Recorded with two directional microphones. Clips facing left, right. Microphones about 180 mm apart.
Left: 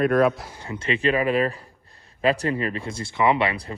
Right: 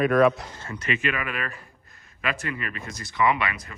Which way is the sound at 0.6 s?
25° left (ahead or behind).